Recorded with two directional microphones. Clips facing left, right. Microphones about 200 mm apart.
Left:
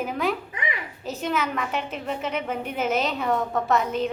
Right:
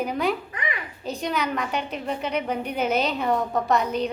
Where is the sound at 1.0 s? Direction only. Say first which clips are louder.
Even; 5° left (ahead or behind).